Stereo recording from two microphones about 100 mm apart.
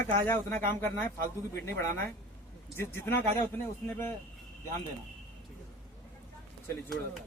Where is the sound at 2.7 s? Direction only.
25° left (ahead or behind).